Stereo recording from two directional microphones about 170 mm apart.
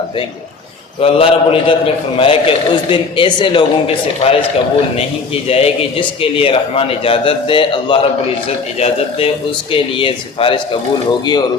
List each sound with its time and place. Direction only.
1.0 s a man's voice: 35° left (ahead or behind)
5.5 s a man's voice: 35° left (ahead or behind)